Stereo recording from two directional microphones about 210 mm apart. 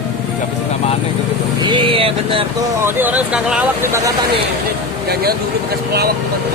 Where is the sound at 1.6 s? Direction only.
25° right (ahead or behind).